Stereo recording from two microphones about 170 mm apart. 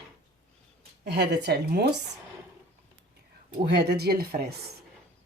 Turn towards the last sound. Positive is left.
turn(degrees=-65)  # may be behind; listen again after turning